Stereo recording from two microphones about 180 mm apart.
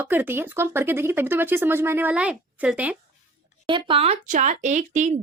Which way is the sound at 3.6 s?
30° right (ahead or behind).